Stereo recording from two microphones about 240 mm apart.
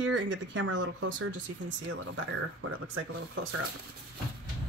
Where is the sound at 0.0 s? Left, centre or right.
Right.